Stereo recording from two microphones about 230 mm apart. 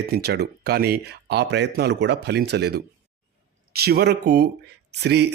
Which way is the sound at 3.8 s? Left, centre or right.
Right.